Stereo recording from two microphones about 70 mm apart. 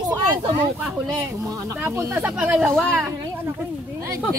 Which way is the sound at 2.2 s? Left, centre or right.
Centre.